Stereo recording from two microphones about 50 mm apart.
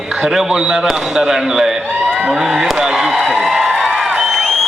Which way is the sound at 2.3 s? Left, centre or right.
Centre.